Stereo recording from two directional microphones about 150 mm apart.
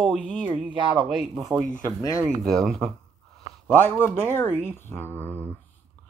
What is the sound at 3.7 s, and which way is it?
Speech, 15° left (ahead or behind).